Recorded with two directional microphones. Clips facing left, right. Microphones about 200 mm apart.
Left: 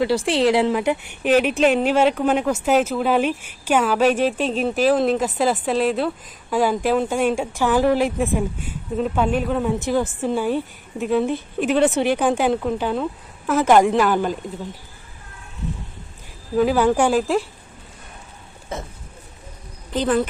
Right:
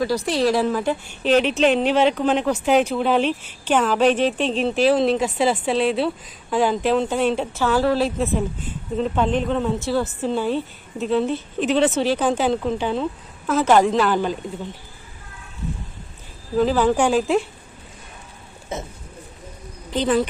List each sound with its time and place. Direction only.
0.0 s a woman's voice: 25° left (ahead or behind); by 14.3 s 10° left (ahead or behind)
16.6 s speech: 10° left (ahead or behind)